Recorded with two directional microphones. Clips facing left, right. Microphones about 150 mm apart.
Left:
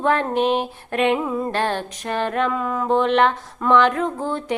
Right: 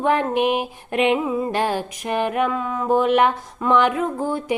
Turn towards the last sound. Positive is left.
turn(degrees=-10)  # may be behind; listen again after turning